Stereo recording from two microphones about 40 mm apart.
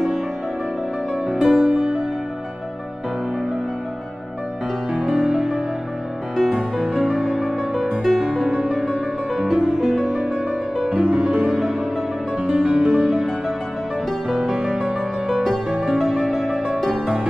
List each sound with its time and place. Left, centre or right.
1.2 s music: centre
5.0 s music: centre
6.3 s music: centre
10.8 s music: right
11.3 s music: centre
14.3 s music: centre